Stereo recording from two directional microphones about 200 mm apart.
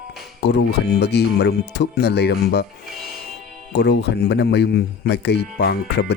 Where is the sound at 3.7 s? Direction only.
55° left (ahead or behind).